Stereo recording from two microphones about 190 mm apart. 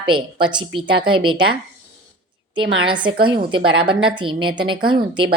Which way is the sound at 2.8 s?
25° right (ahead or behind).